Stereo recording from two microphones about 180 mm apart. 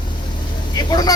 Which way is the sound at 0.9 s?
20° left (ahead or behind).